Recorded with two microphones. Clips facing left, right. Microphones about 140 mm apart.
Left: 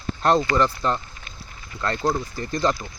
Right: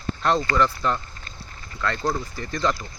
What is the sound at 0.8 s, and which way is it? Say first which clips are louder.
Speech: left 1 dB; 35° left (ahead or behind).